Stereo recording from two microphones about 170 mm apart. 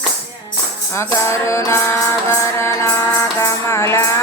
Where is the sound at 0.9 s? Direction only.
15° left (ahead or behind).